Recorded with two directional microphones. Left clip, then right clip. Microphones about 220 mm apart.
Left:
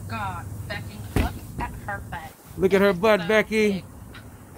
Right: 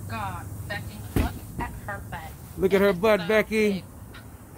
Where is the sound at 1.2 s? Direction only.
40° left (ahead or behind).